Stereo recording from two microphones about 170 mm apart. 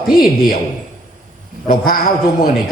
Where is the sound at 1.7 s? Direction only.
60° left (ahead or behind).